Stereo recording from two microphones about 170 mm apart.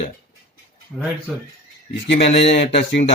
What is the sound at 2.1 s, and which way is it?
A man's voice, 40° left (ahead or behind).